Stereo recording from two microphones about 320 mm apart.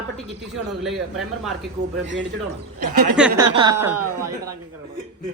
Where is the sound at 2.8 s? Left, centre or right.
Right.